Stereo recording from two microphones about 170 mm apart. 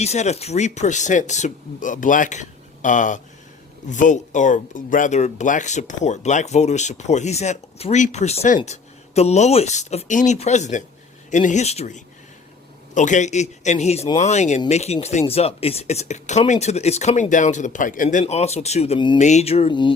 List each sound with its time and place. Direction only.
0.0 s speech: 40° left (ahead or behind)
19.2 s speech: 40° left (ahead or behind)